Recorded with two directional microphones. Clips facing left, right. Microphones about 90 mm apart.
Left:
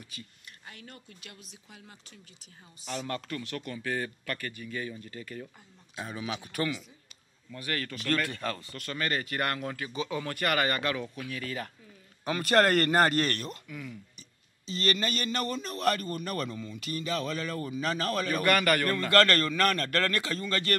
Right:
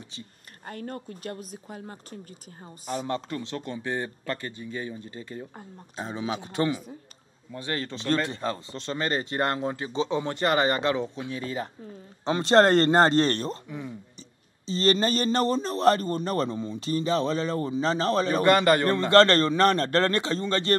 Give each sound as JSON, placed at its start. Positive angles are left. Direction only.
{"t": 0.7, "sound": "speech", "side_deg": -40}
{"t": 3.1, "sound": "a man's voice", "side_deg": -25}